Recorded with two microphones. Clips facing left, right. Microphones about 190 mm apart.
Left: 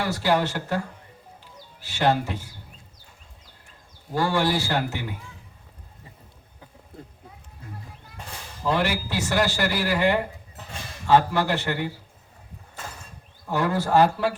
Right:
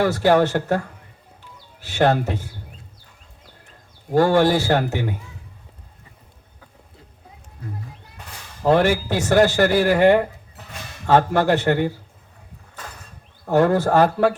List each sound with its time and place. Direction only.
0.0 s speech: 50° right (ahead or behind)
1.9 s speech: 50° right (ahead or behind)
4.1 s speech: 50° right (ahead or behind)
8.6 s speech: 50° right (ahead or behind)
13.4 s speech: 50° right (ahead or behind)